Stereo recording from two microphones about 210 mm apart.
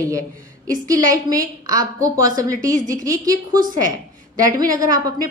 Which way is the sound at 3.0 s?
15° right (ahead or behind).